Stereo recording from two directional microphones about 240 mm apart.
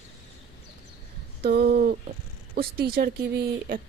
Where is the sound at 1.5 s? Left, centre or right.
Right.